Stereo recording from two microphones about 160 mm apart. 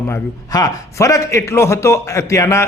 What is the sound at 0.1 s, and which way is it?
A man's voice, 20° left (ahead or behind).